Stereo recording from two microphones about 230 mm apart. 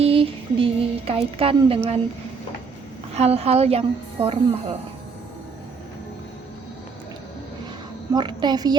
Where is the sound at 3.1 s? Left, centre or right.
Right.